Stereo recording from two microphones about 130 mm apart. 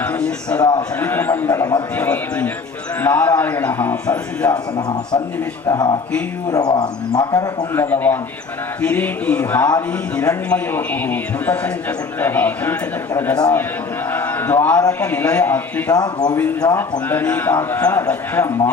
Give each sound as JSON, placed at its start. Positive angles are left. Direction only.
{"t": 0.0, "sound": "a sound", "side_deg": 10}
{"t": 0.6, "sound": "speech", "side_deg": 30}
{"t": 0.9, "sound": "a man's voice", "side_deg": 15}
{"t": 5.6, "sound": "speech", "side_deg": 30}
{"t": 7.7, "sound": "a man's voice", "side_deg": 15}
{"t": 14.1, "sound": "a sound", "side_deg": 15}
{"t": 14.8, "sound": "a man's voice", "side_deg": 15}
{"t": 15.9, "sound": "speech", "side_deg": 30}
{"t": 16.6, "sound": "speech", "side_deg": 40}
{"t": 17.1, "sound": "a man's voice", "side_deg": 15}